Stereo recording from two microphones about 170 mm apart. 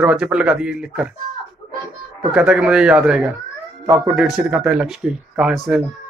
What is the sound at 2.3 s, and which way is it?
Speech, 5° right (ahead or behind).